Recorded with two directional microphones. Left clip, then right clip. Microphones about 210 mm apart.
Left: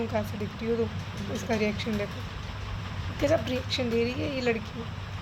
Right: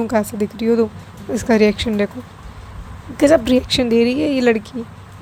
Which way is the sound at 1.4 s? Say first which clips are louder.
Right 14 dB; 35° right (ahead or behind).